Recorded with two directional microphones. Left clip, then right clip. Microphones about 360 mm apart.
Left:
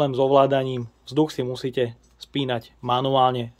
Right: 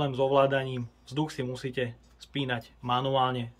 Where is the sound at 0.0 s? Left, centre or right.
Centre.